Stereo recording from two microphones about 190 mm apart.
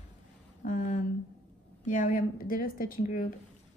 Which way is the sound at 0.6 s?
45° left (ahead or behind).